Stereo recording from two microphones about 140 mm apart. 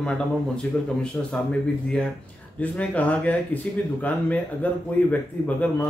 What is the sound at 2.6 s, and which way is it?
Speech, 10° left (ahead or behind).